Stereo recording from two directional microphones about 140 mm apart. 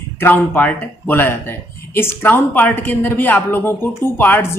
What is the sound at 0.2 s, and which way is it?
Speech, 15° left (ahead or behind).